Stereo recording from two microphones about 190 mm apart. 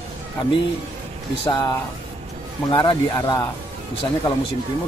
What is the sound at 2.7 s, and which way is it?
Speech, 20° left (ahead or behind).